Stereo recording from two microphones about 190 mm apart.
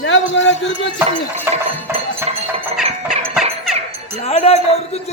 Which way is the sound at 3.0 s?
Centre (ahead or behind).